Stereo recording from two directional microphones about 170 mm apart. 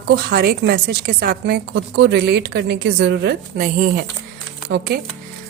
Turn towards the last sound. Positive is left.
turn(degrees=-90)